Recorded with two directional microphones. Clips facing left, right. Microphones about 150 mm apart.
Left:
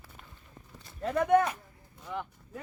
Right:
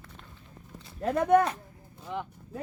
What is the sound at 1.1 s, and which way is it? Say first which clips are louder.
Speech: right 2 dB; 35° right (ahead or behind).